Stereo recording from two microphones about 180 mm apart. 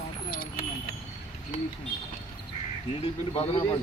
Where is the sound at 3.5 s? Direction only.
30° left (ahead or behind).